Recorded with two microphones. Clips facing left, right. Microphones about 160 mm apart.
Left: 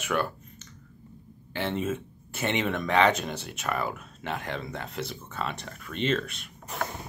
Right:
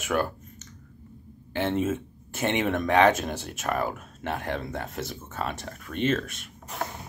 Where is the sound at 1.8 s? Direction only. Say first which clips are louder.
Right 3 dB; 50° right (ahead or behind).